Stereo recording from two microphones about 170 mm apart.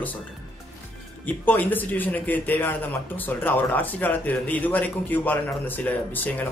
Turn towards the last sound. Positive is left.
turn(degrees=10)  # may be behind; listen again after turning